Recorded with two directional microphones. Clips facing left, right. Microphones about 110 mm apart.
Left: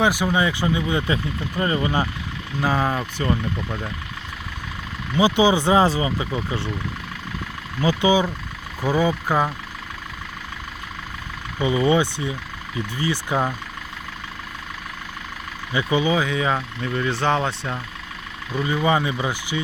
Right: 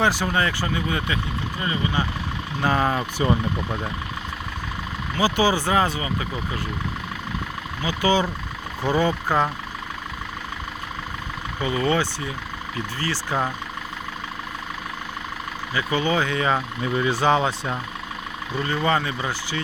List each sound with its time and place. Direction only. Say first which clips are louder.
0.0 s speech: left 2 dB; 15° left (ahead or behind); by 2.0 s 35° left (ahead or behind)
2.6 s fowl: even; centre (ahead or behind)
5.1 s speech: left 3 dB; 20° left (ahead or behind)
8.0 s speech: left 1 dB; 10° left (ahead or behind)
8.8 s fowl: left 1 dB; 5° left (ahead or behind)
11.6 s speech: left 4 dB; 15° left (ahead or behind)
15.7 s fowl: left 2 dB; 15° left (ahead or behind)
16.6 s fowl: right 2 dB; 10° right (ahead or behind)
18.5 s speech: left 2 dB; 10° left (ahead or behind)